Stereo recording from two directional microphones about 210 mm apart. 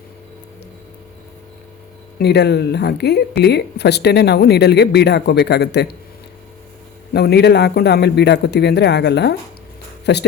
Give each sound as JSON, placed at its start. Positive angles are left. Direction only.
{"t": 2.1, "sound": "speech", "side_deg": 50}
{"t": 7.1, "sound": "speech", "side_deg": 50}